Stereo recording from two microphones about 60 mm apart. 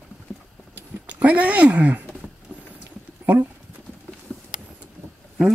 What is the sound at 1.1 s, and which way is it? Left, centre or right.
Speech, right.